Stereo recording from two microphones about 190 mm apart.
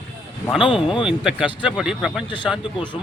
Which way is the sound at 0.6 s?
25° left (ahead or behind).